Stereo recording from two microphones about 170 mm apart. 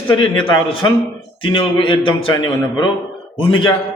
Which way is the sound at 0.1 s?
30° left (ahead or behind).